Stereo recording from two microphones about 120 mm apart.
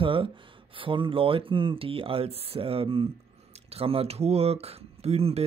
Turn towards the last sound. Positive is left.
turn(degrees=-60)  # may be behind; listen again after turning